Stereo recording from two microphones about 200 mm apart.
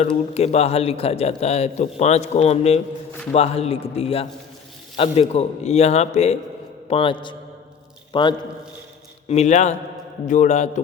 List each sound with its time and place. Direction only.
0.1 s a man's voice: 30° left (ahead or behind)
9.3 s a man's voice: 35° left (ahead or behind)